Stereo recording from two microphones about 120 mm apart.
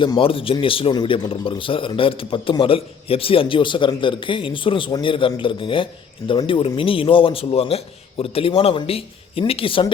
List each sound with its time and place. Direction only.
0.0 s a man's voice: 45° left (ahead or behind)